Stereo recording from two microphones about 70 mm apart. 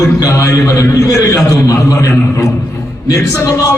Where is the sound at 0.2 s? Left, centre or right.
Left.